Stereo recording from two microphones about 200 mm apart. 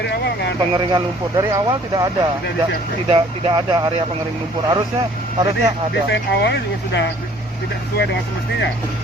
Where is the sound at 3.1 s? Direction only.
25° right (ahead or behind).